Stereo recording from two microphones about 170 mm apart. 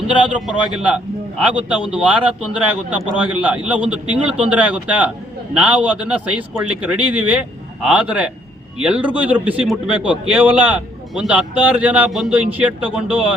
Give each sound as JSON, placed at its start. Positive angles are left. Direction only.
{"t": 0.3, "sound": "a man's voice", "side_deg": -5}